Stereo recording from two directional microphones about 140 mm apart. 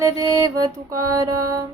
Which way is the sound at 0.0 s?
25° right (ahead or behind).